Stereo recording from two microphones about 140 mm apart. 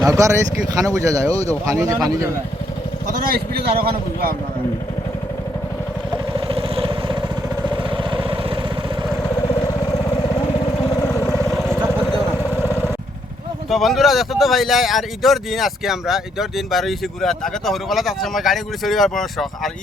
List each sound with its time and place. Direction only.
0.0 s speech: 20° right (ahead or behind)
3.2 s speech: 90° right
6.5 s vehicle: 40° right (ahead or behind)
11.0 s vehicle: 20° left (ahead or behind)
11.4 s vehicle: centre (ahead or behind)
13.7 s speech: centre (ahead or behind)